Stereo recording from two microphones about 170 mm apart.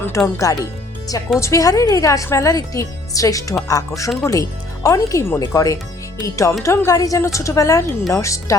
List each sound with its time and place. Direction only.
0.3 s a woman's voice: 20° left (ahead or behind)